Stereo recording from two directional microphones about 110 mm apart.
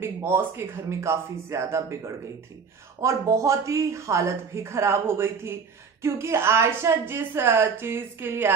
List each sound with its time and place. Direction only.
0.0 s a woman's voice: 20° right (ahead or behind)